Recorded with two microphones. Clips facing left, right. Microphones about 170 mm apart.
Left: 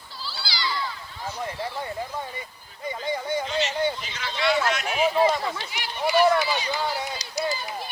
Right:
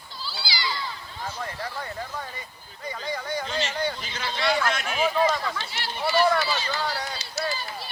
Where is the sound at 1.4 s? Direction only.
20° left (ahead or behind).